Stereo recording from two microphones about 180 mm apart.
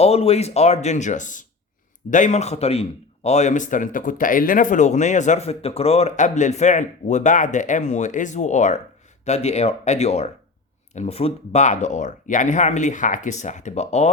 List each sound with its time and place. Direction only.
0.0 s speech: 35° left (ahead or behind)